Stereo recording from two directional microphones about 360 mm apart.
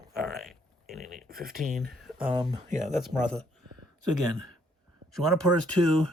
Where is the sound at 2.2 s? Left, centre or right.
Centre.